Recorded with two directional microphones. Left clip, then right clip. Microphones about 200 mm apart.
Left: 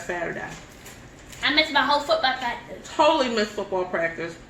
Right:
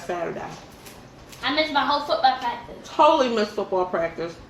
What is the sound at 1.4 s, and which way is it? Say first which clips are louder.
Speech: left 2 dB; 60° left (ahead or behind).